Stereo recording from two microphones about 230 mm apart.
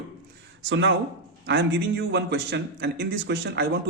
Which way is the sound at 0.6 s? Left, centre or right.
Right.